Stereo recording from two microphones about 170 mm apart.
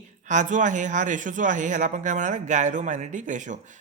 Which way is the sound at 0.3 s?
45° right (ahead or behind).